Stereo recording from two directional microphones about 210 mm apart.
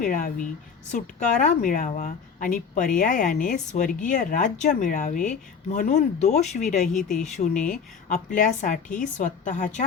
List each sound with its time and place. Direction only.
0.0 s a woman's voice: 40° left (ahead or behind)